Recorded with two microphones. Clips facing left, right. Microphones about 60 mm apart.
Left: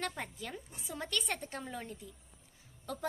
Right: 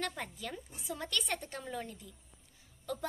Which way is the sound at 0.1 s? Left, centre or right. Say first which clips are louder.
Right 1 dB; centre.